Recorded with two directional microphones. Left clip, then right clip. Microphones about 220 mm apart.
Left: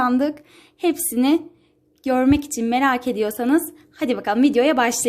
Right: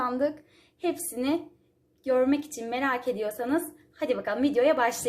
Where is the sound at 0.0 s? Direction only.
50° left (ahead or behind).